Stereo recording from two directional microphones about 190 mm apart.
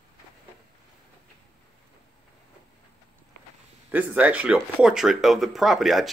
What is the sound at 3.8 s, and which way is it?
Speech, 10° right (ahead or behind).